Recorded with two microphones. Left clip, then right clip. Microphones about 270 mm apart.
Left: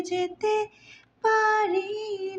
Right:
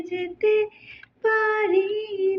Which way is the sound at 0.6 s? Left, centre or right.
Left.